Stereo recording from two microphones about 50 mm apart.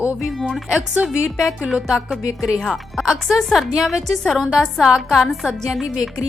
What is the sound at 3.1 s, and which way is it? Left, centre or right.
Music, centre.